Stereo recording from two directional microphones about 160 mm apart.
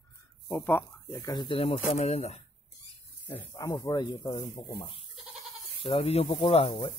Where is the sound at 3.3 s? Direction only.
20° left (ahead or behind).